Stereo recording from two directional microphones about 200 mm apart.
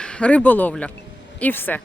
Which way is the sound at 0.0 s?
5° left (ahead or behind).